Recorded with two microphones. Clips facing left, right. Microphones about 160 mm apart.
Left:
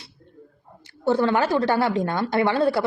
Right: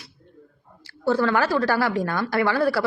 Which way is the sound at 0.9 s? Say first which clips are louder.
Left 1 dB; 20° left (ahead or behind).